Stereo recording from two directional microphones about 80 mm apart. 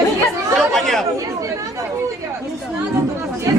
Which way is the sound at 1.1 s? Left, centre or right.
Right.